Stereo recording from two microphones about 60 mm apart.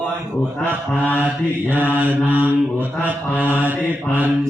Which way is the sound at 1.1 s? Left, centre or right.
Right.